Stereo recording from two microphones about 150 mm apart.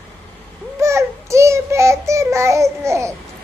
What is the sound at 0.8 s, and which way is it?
Child singing, 20° right (ahead or behind).